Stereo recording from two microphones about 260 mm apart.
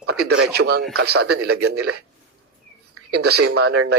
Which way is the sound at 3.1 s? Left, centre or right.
Right.